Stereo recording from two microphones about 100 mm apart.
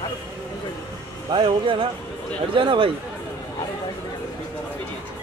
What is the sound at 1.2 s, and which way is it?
Speech, 55° right (ahead or behind).